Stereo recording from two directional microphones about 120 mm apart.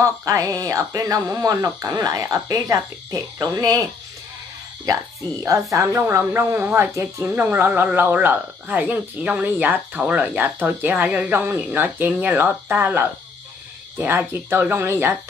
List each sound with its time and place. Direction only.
0.0 s speech: 25° right (ahead or behind)
4.9 s speech: 30° right (ahead or behind)